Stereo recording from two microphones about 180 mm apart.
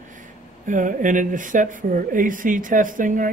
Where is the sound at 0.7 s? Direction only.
45° right (ahead or behind).